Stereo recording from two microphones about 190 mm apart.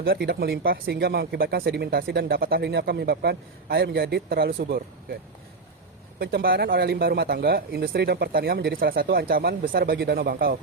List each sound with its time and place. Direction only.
0.0 s speech: 55° right (ahead or behind)
6.1 s speech: 55° right (ahead or behind)